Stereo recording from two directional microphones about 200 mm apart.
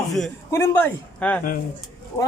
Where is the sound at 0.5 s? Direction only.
10° left (ahead or behind).